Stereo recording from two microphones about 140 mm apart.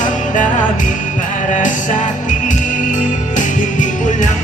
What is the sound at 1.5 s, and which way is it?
Music, 65° left (ahead or behind).